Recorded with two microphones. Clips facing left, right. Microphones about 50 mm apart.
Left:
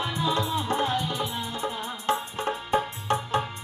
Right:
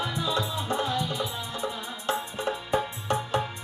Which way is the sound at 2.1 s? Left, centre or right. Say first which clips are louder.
Left 2 dB; left.